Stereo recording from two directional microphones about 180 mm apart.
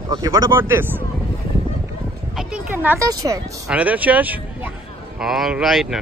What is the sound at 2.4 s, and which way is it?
Speech, 5° right (ahead or behind).